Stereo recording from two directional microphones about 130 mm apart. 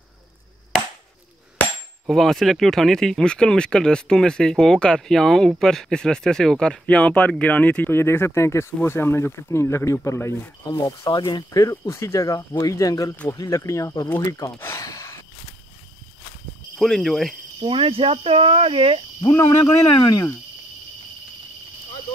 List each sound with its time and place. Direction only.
2.0 s speech: centre (ahead or behind); by 10.5 s 20° left (ahead or behind)
10.7 s speech: 30° left (ahead or behind)
13.1 s speech: 10° left (ahead or behind)
13.4 s speech: 25° left (ahead or behind)
16.7 s speech: centre (ahead or behind)
17.6 s speech: 45° right (ahead or behind)
19.3 s speech: 15° left (ahead or behind)